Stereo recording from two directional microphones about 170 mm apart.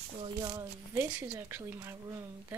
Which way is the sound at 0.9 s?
10° right (ahead or behind).